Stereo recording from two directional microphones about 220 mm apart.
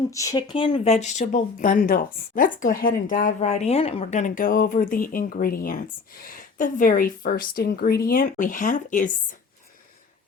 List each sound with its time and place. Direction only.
0.1 s speech: 15° left (ahead or behind); by 9.1 s 35° left (ahead or behind)